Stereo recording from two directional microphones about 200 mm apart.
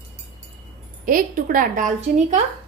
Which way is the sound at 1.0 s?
45° right (ahead or behind).